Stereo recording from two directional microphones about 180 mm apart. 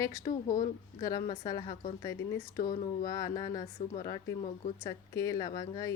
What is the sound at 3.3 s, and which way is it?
Speech, 20° left (ahead or behind).